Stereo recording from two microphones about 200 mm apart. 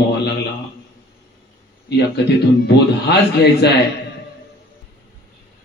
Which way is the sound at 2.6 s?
55° left (ahead or behind).